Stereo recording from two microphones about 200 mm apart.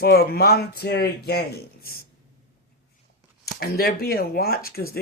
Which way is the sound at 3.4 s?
50° left (ahead or behind).